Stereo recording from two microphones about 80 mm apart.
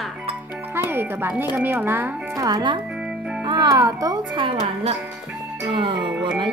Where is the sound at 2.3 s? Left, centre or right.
Right.